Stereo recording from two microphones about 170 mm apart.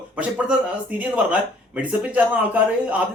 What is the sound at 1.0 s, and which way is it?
Speech, 10° right (ahead or behind).